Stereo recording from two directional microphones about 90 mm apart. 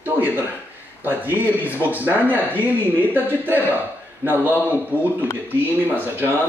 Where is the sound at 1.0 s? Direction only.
20° right (ahead or behind).